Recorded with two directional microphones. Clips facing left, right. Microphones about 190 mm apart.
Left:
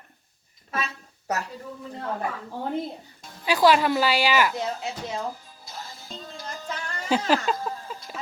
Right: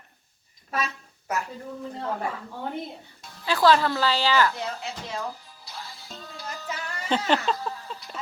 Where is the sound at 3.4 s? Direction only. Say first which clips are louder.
Left 1 dB; 15° left (ahead or behind).